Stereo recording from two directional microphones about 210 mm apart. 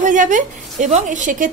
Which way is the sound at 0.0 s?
40° right (ahead or behind).